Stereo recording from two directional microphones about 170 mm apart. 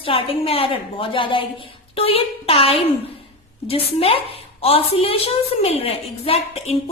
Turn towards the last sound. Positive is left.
turn(degrees=35)  # may be behind; listen again after turning